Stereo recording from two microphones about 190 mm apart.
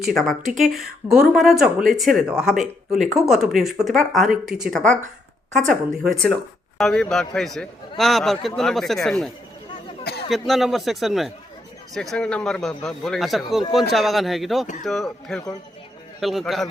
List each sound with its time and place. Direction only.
0.0 s speech: centre (ahead or behind)
10.0 s a sound: 55° left (ahead or behind)
10.2 s speech: centre (ahead or behind)